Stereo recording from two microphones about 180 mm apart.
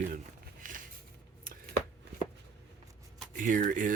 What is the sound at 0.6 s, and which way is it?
Dishes, 50° right (ahead or behind).